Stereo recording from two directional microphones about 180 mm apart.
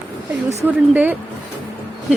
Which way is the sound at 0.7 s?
10° right (ahead or behind).